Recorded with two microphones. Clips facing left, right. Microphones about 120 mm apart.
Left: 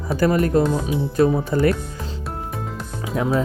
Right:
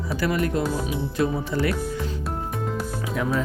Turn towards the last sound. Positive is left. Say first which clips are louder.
# left 4 dB
turn(degrees=30)  # may be behind; listen again after turning